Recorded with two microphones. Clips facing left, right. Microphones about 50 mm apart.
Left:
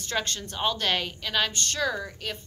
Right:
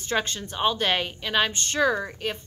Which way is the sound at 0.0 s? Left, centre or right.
Centre.